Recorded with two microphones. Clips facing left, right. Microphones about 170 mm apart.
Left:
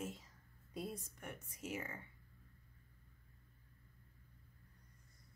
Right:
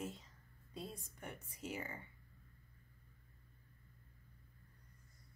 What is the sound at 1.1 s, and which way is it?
Speech, 30° right (ahead or behind).